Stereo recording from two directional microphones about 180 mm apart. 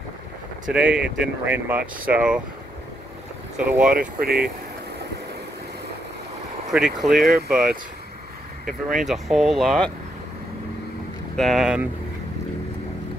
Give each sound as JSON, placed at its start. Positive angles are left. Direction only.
{"t": 0.7, "sound": "speech", "side_deg": -5}
{"t": 3.5, "sound": "speech", "side_deg": -5}
{"t": 4.2, "sound": "speech", "side_deg": -55}
{"t": 6.7, "sound": "speech", "side_deg": 0}
{"t": 8.8, "sound": "speech", "side_deg": 0}
{"t": 11.3, "sound": "speech", "side_deg": 0}